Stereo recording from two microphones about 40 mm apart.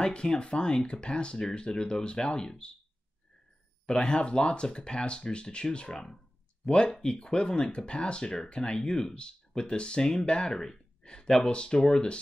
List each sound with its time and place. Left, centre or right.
0.0 s speech: left
3.8 s speech: centre